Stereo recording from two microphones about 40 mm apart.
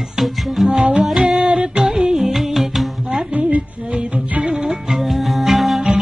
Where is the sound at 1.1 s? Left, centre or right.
Centre.